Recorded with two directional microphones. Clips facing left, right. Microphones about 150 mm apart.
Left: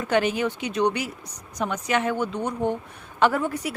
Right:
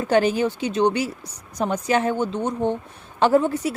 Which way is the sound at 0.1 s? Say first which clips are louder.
Right 4 dB; 35° right (ahead or behind).